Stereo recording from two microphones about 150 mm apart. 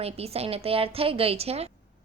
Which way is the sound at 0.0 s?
40° right (ahead or behind).